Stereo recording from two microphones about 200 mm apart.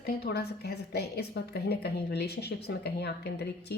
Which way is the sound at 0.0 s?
55° left (ahead or behind).